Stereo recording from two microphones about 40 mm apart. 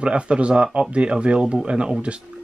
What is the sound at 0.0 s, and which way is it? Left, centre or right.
Speech, right.